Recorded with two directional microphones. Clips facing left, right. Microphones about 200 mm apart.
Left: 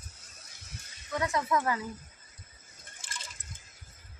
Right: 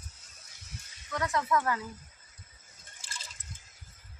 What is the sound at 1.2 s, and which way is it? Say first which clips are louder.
Speech: even; 20° left (ahead or behind).